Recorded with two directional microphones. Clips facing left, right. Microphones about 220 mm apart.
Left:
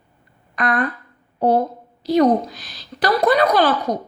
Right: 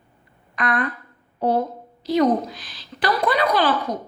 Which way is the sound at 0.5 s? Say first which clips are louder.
Left 3 dB; 40° left (ahead or behind).